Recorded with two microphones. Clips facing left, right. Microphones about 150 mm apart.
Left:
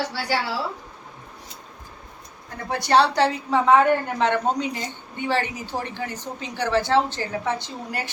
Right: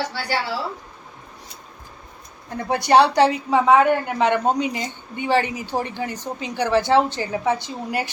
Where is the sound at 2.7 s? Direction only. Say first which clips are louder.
Right 3 dB; 15° right (ahead or behind).